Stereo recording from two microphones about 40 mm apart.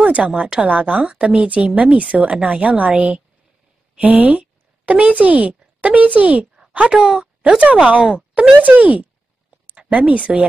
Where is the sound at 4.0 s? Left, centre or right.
Right.